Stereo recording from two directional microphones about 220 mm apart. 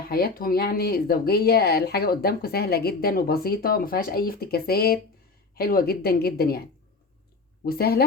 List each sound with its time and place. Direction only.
0.1 s speech: 40° left (ahead or behind)